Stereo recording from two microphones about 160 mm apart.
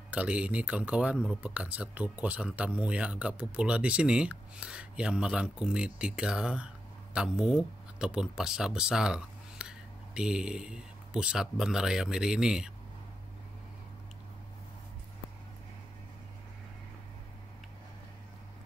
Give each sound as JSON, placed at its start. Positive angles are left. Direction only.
{"t": 0.1, "sound": "speech", "side_deg": -10}